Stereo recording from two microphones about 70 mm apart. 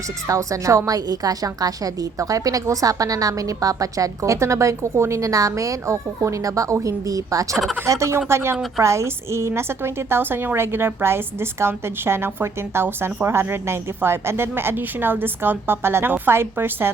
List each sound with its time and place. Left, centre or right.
0.3 s a woman's voice: right
7.9 s a woman's voice: right